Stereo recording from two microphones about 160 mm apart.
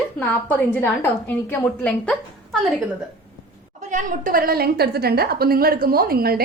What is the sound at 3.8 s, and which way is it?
A woman's voice, 50° right (ahead or behind).